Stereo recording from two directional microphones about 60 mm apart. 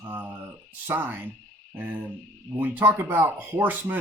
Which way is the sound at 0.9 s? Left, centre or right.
Right.